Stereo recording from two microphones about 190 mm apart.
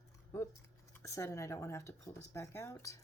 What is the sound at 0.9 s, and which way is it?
Speech, 15° left (ahead or behind).